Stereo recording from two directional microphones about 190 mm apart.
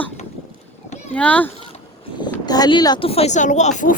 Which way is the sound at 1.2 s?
5° left (ahead or behind).